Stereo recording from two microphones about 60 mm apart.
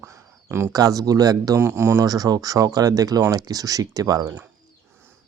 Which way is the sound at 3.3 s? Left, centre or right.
Right.